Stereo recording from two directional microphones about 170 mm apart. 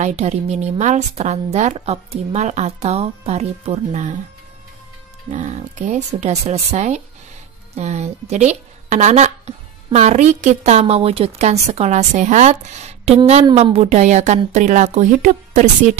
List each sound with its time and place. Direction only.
0.0 s a woman's voice: 40° right (ahead or behind)
5.3 s a woman's voice: 40° right (ahead or behind)